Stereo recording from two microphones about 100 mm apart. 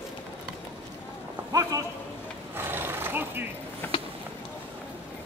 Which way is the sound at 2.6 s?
20° right (ahead or behind).